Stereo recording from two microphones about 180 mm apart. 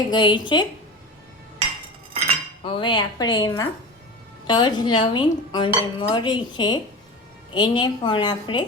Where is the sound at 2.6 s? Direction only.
25° left (ahead or behind).